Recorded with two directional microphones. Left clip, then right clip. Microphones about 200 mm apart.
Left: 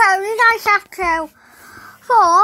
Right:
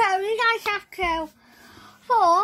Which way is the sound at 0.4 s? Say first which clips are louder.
Left 11 dB; 25° left (ahead or behind).